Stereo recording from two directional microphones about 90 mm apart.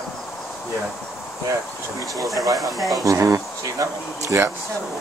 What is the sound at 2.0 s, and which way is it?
Speech, 35° right (ahead or behind).